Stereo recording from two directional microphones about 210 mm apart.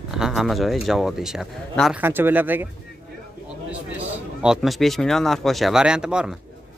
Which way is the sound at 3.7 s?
5° right (ahead or behind).